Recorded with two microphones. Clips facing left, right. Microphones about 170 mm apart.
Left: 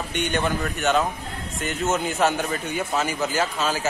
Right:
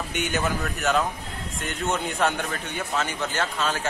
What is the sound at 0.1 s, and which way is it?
A man's voice, 5° right (ahead or behind).